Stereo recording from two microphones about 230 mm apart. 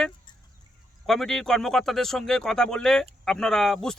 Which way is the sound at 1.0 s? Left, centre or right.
Centre.